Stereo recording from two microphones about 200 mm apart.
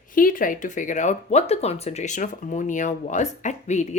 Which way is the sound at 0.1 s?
45° left (ahead or behind).